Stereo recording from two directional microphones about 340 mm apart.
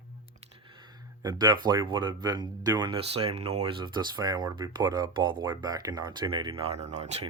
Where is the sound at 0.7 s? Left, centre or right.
Centre.